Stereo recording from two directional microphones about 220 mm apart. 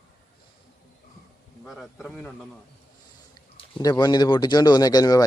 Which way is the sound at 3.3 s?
15° left (ahead or behind).